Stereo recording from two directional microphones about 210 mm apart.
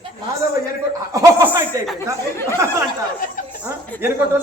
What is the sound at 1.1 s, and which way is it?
Chuckle, 15° right (ahead or behind).